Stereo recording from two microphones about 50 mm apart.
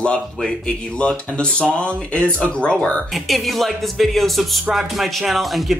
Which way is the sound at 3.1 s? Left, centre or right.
Centre.